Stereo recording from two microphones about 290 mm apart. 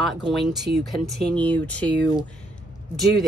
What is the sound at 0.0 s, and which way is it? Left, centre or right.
Speech, centre.